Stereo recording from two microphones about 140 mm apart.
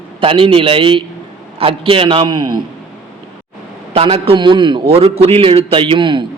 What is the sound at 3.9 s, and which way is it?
A man's voice, 40° right (ahead or behind).